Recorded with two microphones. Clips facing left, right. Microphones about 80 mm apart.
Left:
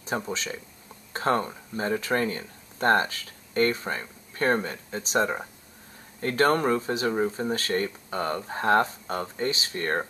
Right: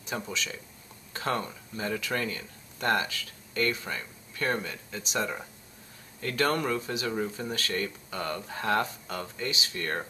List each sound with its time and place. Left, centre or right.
0.3 s speech: left